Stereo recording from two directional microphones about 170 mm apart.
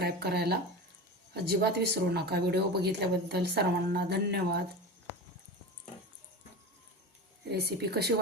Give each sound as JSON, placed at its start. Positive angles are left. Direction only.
{"t": 0.0, "sound": "speech", "side_deg": -70}
{"t": 7.5, "sound": "speech", "side_deg": -70}